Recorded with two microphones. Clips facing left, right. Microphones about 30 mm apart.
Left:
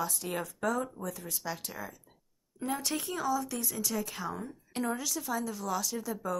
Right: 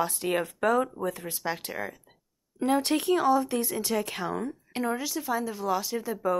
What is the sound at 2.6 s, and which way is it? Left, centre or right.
Speech, right.